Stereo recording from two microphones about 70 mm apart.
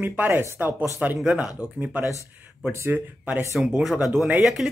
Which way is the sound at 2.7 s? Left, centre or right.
Right.